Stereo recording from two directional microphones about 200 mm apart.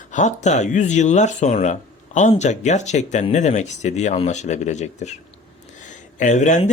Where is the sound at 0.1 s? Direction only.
35° left (ahead or behind).